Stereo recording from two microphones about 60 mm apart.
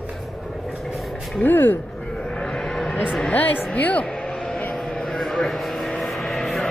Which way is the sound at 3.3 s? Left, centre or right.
Left.